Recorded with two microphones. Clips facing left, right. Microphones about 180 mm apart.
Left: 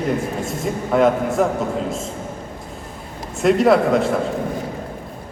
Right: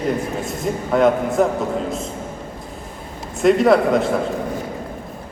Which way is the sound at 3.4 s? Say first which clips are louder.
Right 1 dB; centre (ahead or behind).